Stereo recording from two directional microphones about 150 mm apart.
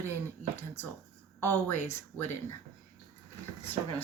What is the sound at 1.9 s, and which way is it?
Speech, 15° left (ahead or behind).